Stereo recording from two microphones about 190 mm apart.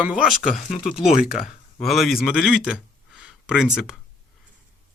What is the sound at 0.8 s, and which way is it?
Speech, 5° right (ahead or behind).